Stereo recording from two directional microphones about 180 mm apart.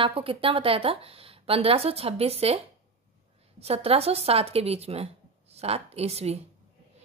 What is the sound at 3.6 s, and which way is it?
A woman's voice, 35° right (ahead or behind).